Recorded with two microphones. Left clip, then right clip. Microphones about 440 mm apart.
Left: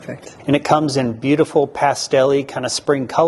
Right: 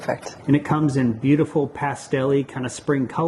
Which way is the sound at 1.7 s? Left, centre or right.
Left.